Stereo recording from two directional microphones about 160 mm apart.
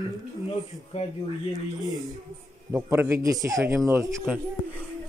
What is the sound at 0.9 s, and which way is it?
Speech, 45° left (ahead or behind).